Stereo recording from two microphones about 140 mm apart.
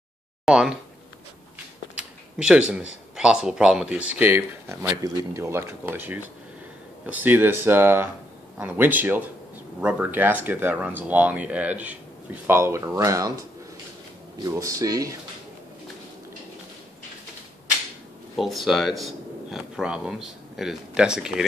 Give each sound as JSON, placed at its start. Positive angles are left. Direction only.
{"t": 0.5, "sound": "speech", "side_deg": -5}
{"t": 2.0, "sound": "a sound", "side_deg": -5}
{"t": 3.2, "sound": "speech", "side_deg": -5}
{"t": 18.3, "sound": "speech", "side_deg": 0}